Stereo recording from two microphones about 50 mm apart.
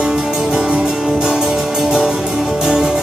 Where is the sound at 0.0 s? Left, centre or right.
Centre.